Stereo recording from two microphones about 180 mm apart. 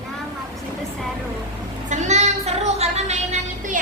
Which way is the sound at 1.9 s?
40° right (ahead or behind).